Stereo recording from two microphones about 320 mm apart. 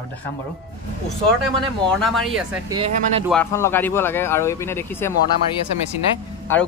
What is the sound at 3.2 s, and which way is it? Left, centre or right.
Speech, centre.